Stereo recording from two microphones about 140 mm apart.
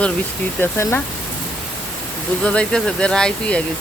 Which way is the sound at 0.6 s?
15° left (ahead or behind).